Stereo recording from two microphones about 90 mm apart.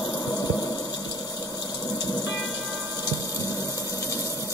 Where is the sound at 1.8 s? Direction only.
45° left (ahead or behind).